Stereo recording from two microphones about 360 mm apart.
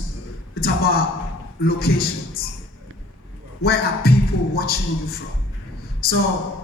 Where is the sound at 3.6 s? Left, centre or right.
Left.